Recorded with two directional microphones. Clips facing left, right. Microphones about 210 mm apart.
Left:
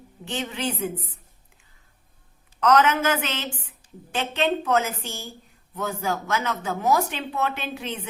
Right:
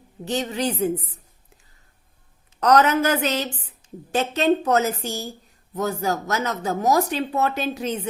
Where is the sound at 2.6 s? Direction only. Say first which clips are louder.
Right 2 dB; 40° right (ahead or behind).